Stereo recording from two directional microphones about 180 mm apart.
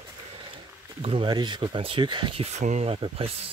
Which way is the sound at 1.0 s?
30° right (ahead or behind).